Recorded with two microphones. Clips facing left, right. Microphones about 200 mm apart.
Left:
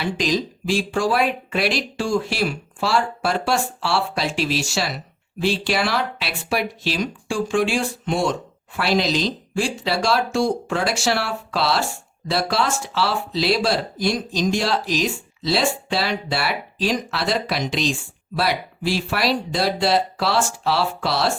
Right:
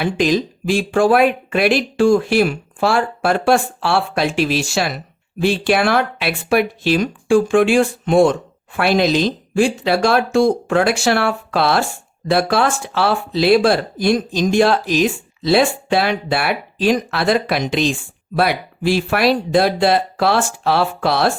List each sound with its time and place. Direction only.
0.0 s speech: 55° right (ahead or behind)